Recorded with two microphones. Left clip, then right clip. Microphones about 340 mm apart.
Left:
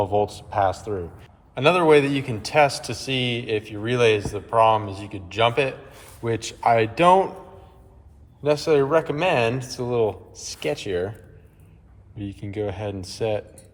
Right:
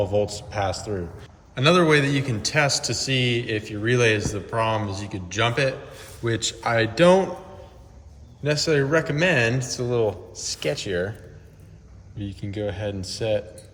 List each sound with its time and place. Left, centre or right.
0.0 s a man's voice: centre
8.4 s a man's voice: centre
12.1 s a man's voice: centre